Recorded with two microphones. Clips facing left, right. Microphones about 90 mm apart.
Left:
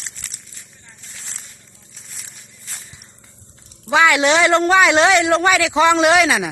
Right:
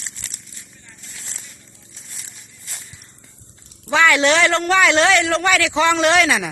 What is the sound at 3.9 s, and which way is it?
A man's voice, 15° left (ahead or behind).